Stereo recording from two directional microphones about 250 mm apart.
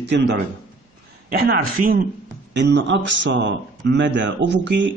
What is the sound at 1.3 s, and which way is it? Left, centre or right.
A man's voice, right.